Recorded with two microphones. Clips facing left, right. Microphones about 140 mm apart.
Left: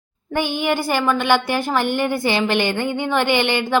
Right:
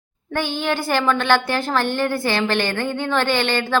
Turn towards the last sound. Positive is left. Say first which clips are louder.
# left 2 dB
turn(degrees=15)  # may be behind; listen again after turning